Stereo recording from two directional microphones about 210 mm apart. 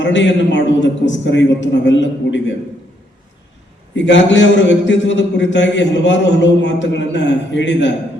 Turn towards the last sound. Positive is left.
turn(degrees=60)  # may be behind; listen again after turning